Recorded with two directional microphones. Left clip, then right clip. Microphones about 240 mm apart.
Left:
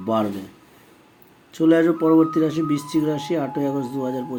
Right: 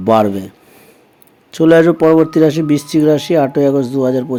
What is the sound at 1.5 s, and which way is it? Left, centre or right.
Speech, right.